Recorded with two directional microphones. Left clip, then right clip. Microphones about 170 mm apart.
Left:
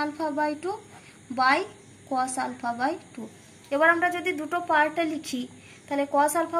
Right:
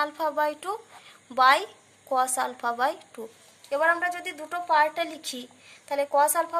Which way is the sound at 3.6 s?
25° right (ahead or behind).